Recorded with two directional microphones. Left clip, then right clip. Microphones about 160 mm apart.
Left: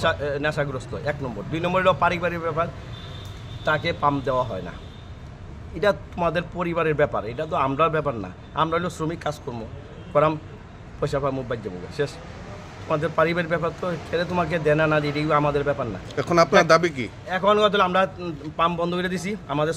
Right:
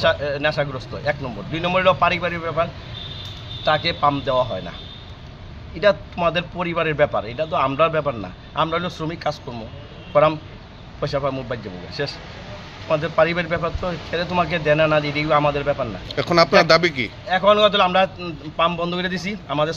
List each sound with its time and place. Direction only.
0.0 s a man's voice: 15° left (ahead or behind)
5.8 s a man's voice: 15° left (ahead or behind)
16.1 s speech: centre (ahead or behind)
17.3 s a man's voice: 10° left (ahead or behind)